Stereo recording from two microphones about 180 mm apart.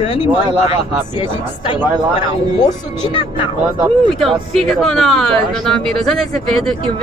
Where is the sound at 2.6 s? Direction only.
25° left (ahead or behind).